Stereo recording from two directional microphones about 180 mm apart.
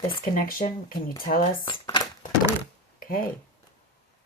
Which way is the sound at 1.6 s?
25° left (ahead or behind).